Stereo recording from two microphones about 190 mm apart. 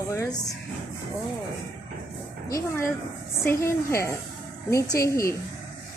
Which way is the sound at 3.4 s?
15° left (ahead or behind).